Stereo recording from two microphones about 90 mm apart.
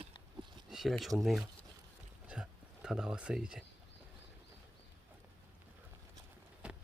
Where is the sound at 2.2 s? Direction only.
10° right (ahead or behind).